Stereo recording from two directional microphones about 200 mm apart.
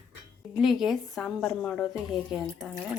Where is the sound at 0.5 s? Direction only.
Centre (ahead or behind).